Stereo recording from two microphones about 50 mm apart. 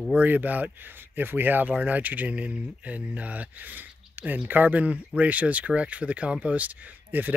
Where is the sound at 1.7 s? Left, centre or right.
Right.